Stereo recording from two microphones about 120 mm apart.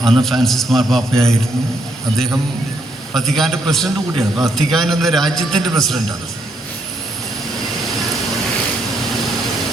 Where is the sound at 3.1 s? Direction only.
Centre (ahead or behind).